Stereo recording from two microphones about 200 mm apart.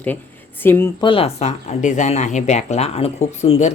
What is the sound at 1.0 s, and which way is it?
A woman's voice, 30° left (ahead or behind).